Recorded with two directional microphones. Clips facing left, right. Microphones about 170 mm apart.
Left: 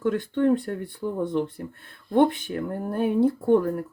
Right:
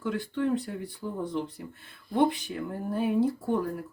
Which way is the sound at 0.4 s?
55° left (ahead or behind).